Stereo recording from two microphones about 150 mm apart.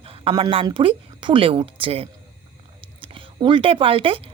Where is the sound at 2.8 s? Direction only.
35° right (ahead or behind).